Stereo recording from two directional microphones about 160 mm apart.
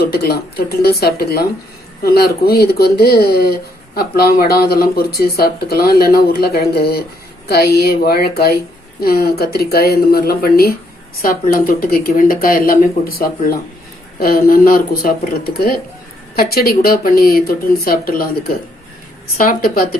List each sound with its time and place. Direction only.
0.0 s speech: 75° left (ahead or behind)